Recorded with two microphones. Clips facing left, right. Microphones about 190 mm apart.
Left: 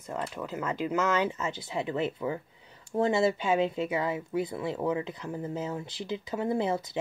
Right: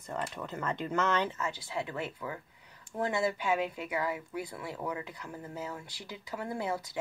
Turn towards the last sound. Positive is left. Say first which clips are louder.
# left 6 dB
turn(degrees=25)  # may be behind; listen again after turning